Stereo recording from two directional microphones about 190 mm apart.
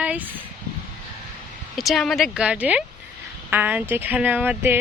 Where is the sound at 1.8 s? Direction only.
Centre (ahead or behind).